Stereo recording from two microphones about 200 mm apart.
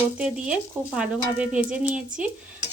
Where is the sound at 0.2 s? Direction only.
5° right (ahead or behind).